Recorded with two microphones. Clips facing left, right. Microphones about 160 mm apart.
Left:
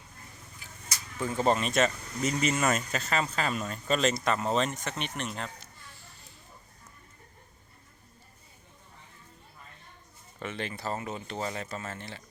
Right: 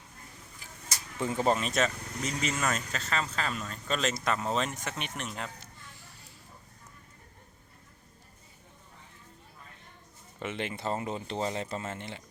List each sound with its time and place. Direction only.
1.4 s speech: 5° right (ahead or behind)
10.4 s speech: 20° right (ahead or behind)